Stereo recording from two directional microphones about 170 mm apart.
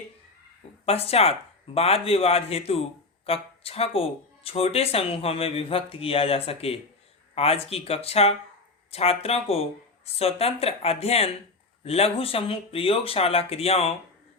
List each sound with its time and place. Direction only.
0.9 s speech: 35° left (ahead or behind)